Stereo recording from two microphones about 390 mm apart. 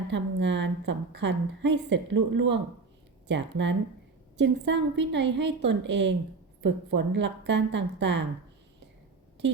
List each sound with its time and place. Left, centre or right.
0.1 s a woman's voice: right